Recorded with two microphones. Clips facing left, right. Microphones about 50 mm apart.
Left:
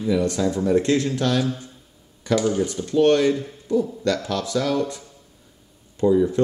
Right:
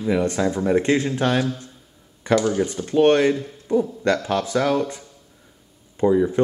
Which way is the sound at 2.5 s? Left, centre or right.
Right.